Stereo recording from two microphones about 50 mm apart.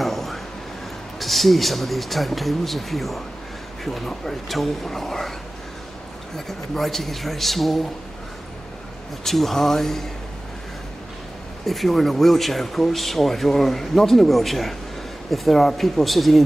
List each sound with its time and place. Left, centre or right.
0.0 s vehicle: centre
1.2 s speech: centre
6.3 s speech: centre
9.2 s speech: centre
11.6 s speech: centre